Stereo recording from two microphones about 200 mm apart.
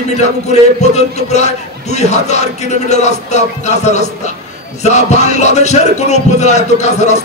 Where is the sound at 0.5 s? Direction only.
35° left (ahead or behind).